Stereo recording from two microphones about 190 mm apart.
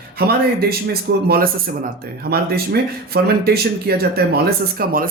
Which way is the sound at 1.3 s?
50° right (ahead or behind).